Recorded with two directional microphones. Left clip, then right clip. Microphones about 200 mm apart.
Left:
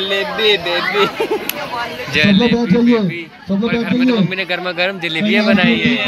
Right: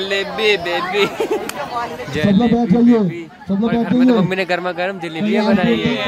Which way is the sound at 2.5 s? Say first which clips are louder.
Left 1 dB; 65° right (ahead or behind).